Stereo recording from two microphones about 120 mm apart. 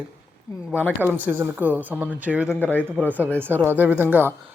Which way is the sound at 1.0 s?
15° right (ahead or behind).